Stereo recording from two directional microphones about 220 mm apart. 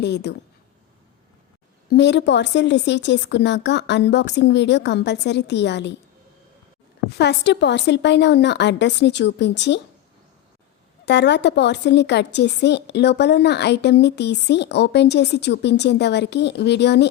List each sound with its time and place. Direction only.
0.0 s a woman's voice: 50° left (ahead or behind)
1.9 s a woman's voice: 50° left (ahead or behind)
7.2 s a woman's voice: 50° left (ahead or behind)
11.0 s a woman's voice: 50° left (ahead or behind)